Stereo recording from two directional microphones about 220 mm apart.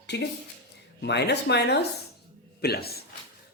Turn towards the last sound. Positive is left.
turn(degrees=45)  # may be behind; listen again after turning